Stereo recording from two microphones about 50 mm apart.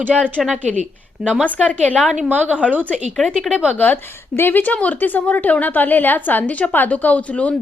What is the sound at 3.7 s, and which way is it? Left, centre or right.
A woman's voice, left.